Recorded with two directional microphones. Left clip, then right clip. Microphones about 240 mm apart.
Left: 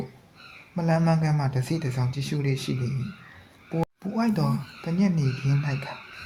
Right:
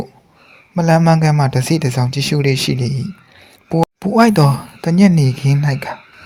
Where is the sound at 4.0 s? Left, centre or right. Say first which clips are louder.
Right 19 dB; right.